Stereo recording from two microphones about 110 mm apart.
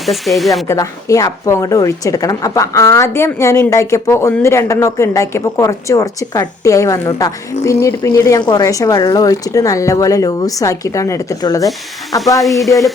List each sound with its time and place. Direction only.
0.0 s speech: centre (ahead or behind)
0.7 s a woman's voice: 30° left (ahead or behind)
12.4 s speech: centre (ahead or behind)